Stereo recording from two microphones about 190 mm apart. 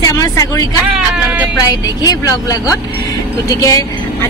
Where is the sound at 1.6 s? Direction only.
20° left (ahead or behind).